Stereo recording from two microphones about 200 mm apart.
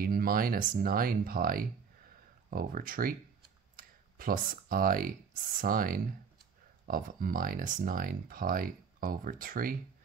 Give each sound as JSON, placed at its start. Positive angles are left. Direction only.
{"t": 0.0, "sound": "speech", "side_deg": -45}